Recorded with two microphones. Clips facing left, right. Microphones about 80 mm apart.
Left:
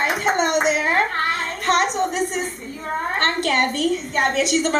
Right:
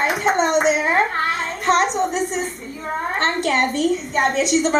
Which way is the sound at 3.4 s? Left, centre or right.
Centre.